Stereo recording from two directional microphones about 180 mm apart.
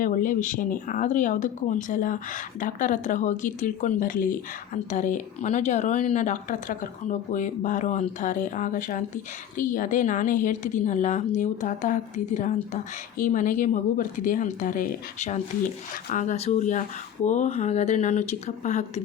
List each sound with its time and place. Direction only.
0.0 s speech: 45° left (ahead or behind)